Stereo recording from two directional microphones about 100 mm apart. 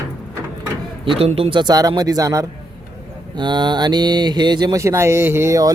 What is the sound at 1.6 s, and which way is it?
Speech, 40° right (ahead or behind).